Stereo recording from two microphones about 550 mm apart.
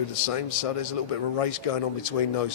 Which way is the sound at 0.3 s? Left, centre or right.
Left.